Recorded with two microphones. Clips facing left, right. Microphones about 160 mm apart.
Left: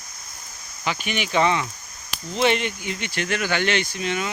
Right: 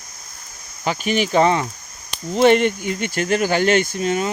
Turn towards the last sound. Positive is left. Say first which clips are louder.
# right 6 dB
turn(degrees=-40)  # may be behind; listen again after turning